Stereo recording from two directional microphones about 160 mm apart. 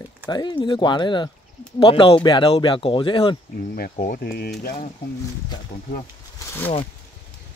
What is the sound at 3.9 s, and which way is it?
Speech, 65° left (ahead or behind).